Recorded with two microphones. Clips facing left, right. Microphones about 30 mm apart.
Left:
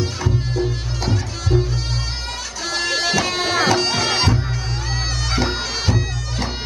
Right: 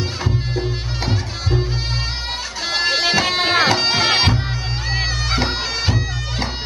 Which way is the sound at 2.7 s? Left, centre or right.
Right.